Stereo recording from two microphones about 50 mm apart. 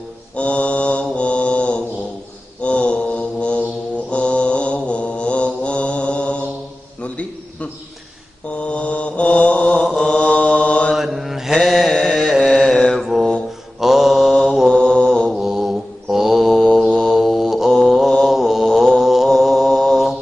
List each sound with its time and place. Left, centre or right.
0.4 s mantra: left
8.5 s mantra: left
11.0 s mantra: centre
12.0 s music: centre
12.3 s carnatic music: centre
12.9 s mantra: centre
14.7 s mantra: centre
15.3 s mantra: centre